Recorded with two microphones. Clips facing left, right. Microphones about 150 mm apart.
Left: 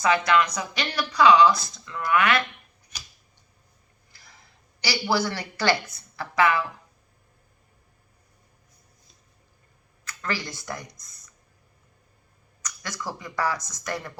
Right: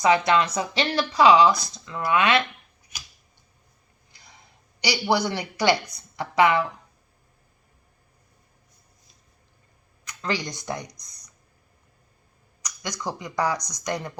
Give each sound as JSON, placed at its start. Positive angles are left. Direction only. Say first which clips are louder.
{"t": 0.0, "sound": "speech", "louder": "right 2 dB", "side_deg": -25}
{"t": 4.1, "sound": "a sound", "louder": "right 2 dB", "side_deg": -20}
{"t": 4.8, "sound": "a woman's voice", "louder": "right 2 dB", "side_deg": -15}
{"t": 10.1, "sound": "speech", "louder": "right 3 dB", "side_deg": -20}
{"t": 12.6, "sound": "speech", "louder": "right 3 dB", "side_deg": -15}